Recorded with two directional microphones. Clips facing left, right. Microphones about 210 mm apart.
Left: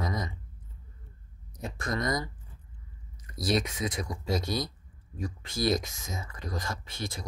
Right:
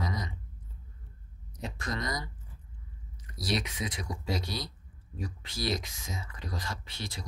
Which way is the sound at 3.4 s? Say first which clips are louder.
Left 4 dB; 45° left (ahead or behind).